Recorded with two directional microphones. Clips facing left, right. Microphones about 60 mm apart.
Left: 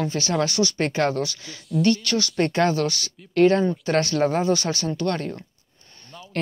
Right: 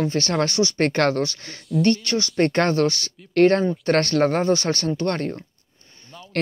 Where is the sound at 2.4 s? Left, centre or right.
Right.